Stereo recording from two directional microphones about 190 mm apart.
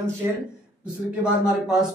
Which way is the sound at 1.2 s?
5° right (ahead or behind).